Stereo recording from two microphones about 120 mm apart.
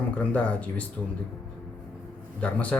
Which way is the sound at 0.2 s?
10° left (ahead or behind).